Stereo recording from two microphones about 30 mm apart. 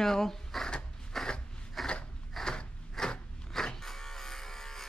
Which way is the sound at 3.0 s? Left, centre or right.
Left.